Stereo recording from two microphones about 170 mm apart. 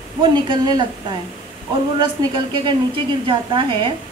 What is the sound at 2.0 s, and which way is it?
A man's voice, 30° right (ahead or behind).